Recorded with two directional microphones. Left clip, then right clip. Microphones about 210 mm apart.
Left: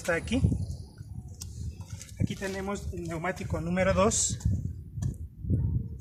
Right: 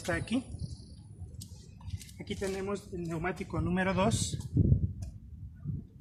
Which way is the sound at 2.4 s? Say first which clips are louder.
Even; 40° left (ahead or behind).